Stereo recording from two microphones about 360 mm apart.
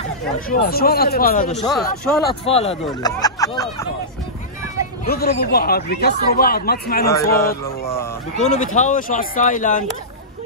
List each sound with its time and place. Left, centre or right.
0.5 s speech: left
1.5 s speech: centre
2.4 s a man's voice: centre
5.0 s speech: left
7.1 s a man's voice: centre
8.4 s speech: centre